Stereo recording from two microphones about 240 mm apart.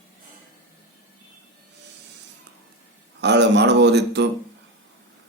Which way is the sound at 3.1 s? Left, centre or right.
Right.